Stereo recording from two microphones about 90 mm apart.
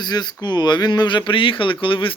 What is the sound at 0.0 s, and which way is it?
Speech, 50° left (ahead or behind).